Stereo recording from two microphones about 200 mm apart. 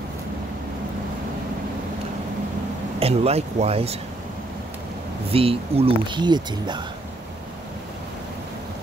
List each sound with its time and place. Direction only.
3.0 s speech: 30° right (ahead or behind)
5.3 s speech: 30° right (ahead or behind)